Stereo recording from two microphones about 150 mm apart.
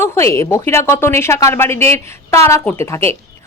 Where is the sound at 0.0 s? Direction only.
20° left (ahead or behind).